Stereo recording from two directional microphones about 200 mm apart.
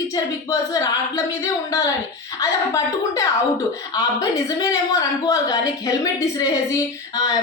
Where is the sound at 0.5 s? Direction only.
15° left (ahead or behind).